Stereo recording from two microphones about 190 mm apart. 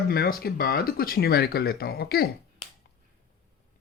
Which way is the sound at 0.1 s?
50° left (ahead or behind).